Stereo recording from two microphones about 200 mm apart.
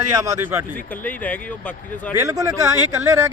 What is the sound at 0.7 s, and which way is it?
Speech, 10° left (ahead or behind).